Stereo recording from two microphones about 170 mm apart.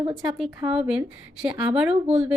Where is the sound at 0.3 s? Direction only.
5° right (ahead or behind).